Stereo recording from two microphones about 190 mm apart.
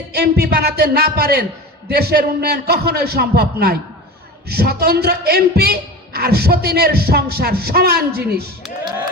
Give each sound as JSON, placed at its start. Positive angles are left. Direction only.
{"t": 0.1, "sound": "speech", "side_deg": -55}